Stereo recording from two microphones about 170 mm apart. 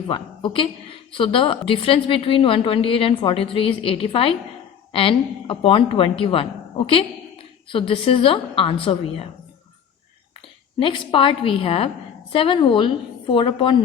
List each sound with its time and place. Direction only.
0.1 s a woman's voice: 30° left (ahead or behind)
10.8 s a woman's voice: 30° left (ahead or behind)